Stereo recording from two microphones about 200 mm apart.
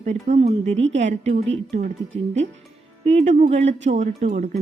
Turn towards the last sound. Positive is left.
turn(degrees=-40)  # may be behind; listen again after turning